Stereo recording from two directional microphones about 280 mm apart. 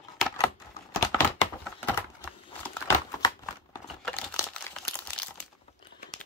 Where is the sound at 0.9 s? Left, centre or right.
Centre.